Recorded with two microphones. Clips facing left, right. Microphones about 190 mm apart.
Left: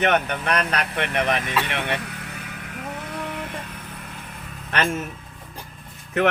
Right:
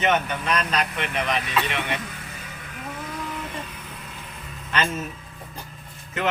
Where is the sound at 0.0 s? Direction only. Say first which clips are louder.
Left 2 dB; 60° left (ahead or behind).